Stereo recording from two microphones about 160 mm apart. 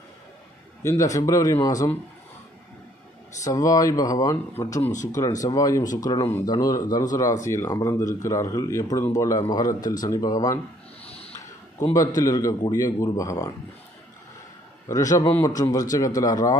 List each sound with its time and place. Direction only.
0.8 s speech: 20° left (ahead or behind)
3.4 s speech: 20° left (ahead or behind)
6.2 s speech: 15° left (ahead or behind)
11.1 s a sound: 40° left (ahead or behind)
12.2 s speech: 20° left (ahead or behind)
14.9 s speech: 20° left (ahead or behind)